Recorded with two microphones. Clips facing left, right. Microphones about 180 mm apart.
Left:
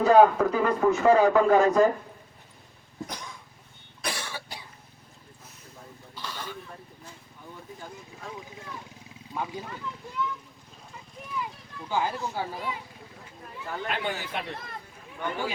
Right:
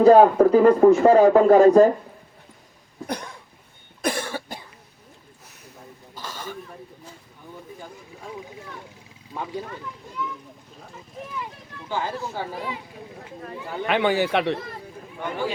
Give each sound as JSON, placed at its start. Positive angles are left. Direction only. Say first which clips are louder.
{"t": 0.0, "sound": "a man's voice", "louder": "right 6 dB", "side_deg": -35}
{"t": 4.0, "sound": "cough", "louder": "right 9 dB", "side_deg": -50}
{"t": 6.1, "sound": "a sound", "louder": "right 2 dB", "side_deg": -45}
{"t": 11.9, "sound": "speech", "louder": "right 1 dB", "side_deg": 10}
{"t": 13.4, "sound": "speech", "louder": "right 5 dB", "side_deg": -80}